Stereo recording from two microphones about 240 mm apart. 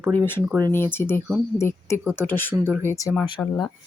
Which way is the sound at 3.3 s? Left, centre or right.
Centre.